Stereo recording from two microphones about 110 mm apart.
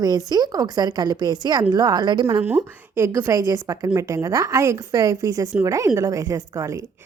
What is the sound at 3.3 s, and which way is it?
A woman's voice, 35° right (ahead or behind).